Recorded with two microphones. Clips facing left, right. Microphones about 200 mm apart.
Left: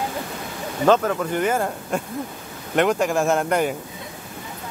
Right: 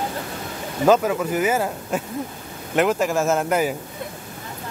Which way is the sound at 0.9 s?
5° right (ahead or behind).